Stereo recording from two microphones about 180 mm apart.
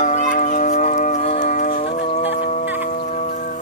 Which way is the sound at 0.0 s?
45° left (ahead or behind).